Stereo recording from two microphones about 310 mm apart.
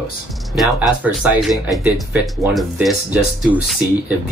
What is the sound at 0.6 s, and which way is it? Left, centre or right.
Speech, centre.